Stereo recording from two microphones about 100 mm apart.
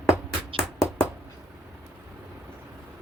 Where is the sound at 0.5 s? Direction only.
65° right (ahead or behind).